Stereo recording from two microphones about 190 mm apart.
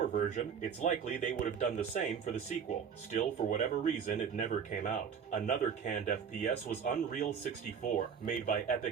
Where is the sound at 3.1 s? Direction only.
40° left (ahead or behind).